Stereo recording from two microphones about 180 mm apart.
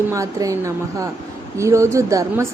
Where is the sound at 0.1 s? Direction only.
20° right (ahead or behind).